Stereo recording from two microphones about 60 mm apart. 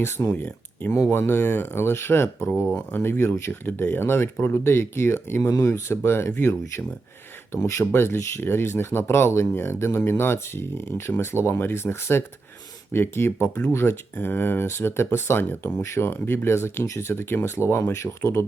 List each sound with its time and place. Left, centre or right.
0.0 s speech: left
0.3 s speech: left
0.9 s speech: left
1.3 s speech: left
5.4 s speech: left
5.6 s speech: left
16.8 s speech: left